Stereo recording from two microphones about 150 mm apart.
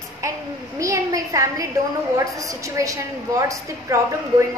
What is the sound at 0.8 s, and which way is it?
A woman's voice, 20° right (ahead or behind).